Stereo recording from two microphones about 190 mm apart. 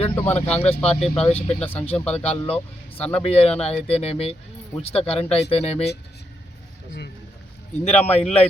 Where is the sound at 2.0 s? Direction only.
5° left (ahead or behind).